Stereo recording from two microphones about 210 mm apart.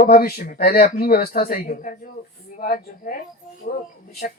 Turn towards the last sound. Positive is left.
turn(degrees=40)  # may be behind; listen again after turning